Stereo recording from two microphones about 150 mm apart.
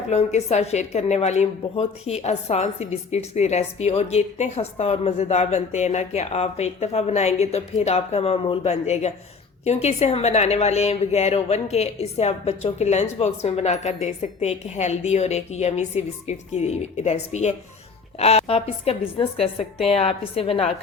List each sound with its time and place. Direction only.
0.1 s a woman's voice: 45° left (ahead or behind)